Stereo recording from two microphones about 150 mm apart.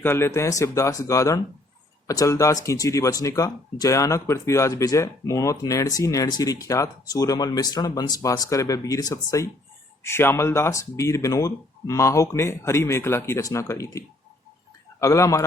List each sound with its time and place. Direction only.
0.0 s speech: 15° left (ahead or behind)
15.0 s speech: 20° left (ahead or behind)